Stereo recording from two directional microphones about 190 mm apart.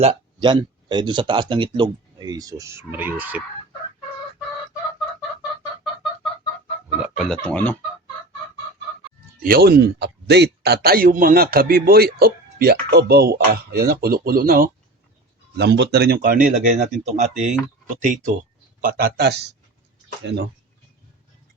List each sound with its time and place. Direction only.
0.0 s speech: 30° right (ahead or behind); by 3.4 s 10° right (ahead or behind)
7.0 s speech: centre (ahead or behind)
9.4 s speech: 55° right (ahead or behind)
15.5 s speech: 60° right (ahead or behind)